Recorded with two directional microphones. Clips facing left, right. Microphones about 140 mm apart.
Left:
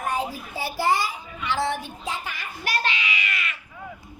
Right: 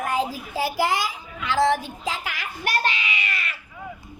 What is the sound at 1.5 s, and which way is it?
Child singing, 90° right.